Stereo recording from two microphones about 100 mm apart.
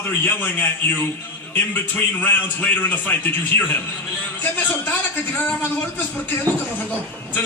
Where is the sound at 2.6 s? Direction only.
15° left (ahead or behind).